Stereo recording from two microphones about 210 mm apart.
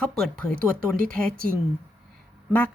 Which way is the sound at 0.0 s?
Centre (ahead or behind).